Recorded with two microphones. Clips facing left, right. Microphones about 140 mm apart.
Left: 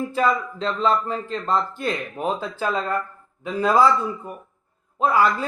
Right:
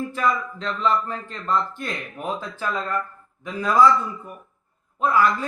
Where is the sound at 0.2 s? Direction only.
30° left (ahead or behind).